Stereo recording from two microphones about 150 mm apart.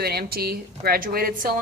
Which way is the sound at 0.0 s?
90° right.